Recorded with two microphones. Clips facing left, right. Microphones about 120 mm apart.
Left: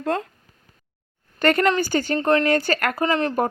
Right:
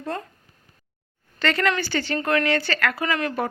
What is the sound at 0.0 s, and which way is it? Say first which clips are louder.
Speech: left 6 dB; 90° left.